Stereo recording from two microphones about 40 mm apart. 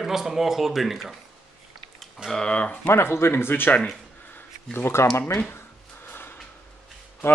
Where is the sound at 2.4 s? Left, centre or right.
Left.